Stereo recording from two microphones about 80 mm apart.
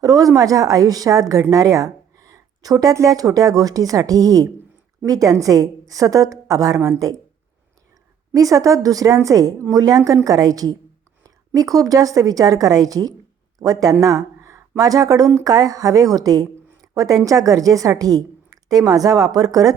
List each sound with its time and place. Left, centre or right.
0.0 s a woman's voice: right
8.3 s a woman's voice: right